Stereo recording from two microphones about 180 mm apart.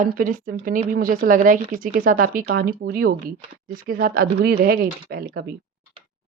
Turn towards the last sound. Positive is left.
turn(degrees=-65)  # may be behind; listen again after turning